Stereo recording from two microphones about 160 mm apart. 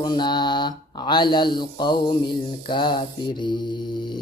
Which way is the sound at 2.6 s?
30° left (ahead or behind).